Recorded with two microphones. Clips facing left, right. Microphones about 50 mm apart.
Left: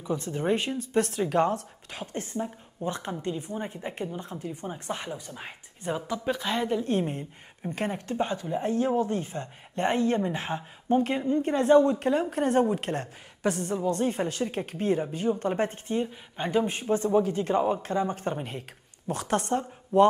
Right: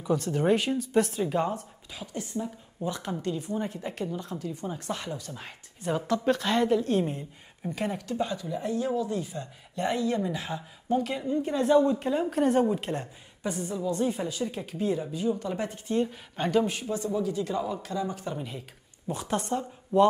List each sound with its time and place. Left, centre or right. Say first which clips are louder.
0.0 s speech: right 3 dB; centre
0.7 s speech: right 1 dB; left
2.3 s speech: left 1 dB; left
5.9 s speech: right 3 dB; centre
6.8 s speech: right 1 dB; left
13.7 s speech: left 2 dB; left
15.9 s speech: right 2 dB; centre; by 18.6 s left
19.0 s speech: left 2 dB; left